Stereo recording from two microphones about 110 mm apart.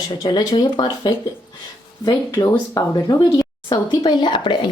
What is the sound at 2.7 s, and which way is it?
Speech, 30° left (ahead or behind).